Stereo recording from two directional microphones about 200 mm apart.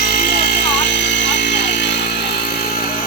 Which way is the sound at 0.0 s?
50° left (ahead or behind).